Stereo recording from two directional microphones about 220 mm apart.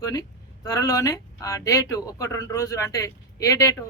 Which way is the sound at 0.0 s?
15° left (ahead or behind).